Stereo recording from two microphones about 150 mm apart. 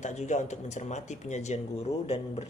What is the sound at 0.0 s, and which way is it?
Speech, 50° left (ahead or behind).